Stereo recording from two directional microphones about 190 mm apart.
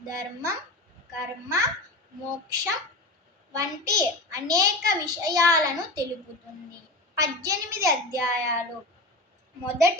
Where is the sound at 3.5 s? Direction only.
20° right (ahead or behind).